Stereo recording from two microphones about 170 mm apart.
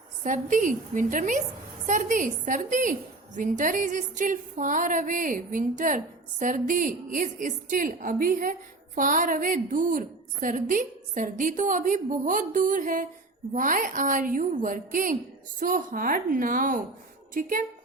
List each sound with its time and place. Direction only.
0.2 s a woman's voice: 50° right (ahead or behind)